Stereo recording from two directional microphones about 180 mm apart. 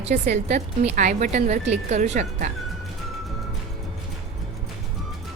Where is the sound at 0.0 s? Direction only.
40° right (ahead or behind).